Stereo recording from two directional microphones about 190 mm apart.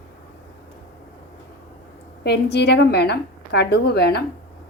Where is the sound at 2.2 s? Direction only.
60° left (ahead or behind).